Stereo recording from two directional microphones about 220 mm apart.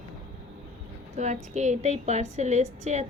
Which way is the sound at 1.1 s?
30° right (ahead or behind).